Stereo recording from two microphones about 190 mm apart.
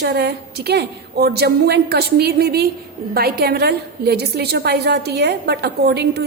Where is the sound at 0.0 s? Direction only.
55° right (ahead or behind).